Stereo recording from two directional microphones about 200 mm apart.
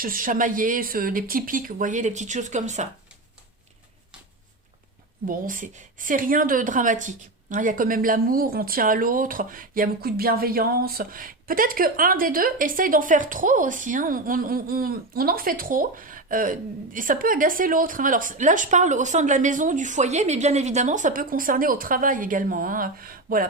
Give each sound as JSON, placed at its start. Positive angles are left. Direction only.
{"t": 0.0, "sound": "a woman's voice", "side_deg": -45}
{"t": 5.2, "sound": "a woman's voice", "side_deg": -45}